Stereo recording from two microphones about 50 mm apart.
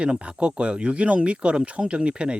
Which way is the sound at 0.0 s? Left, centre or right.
Right.